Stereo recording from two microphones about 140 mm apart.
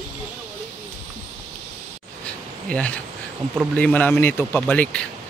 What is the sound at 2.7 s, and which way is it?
Speech, 10° left (ahead or behind).